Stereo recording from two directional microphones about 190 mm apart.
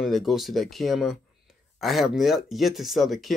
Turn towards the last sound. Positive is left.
turn(degrees=0)  # may be behind; listen again after turning